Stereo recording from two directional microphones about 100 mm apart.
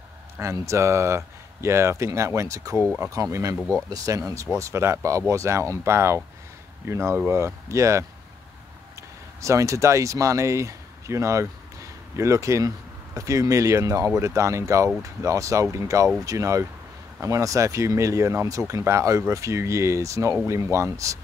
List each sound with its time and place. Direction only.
0.4 s speech: 30° right (ahead or behind)
9.4 s speech: 30° right (ahead or behind)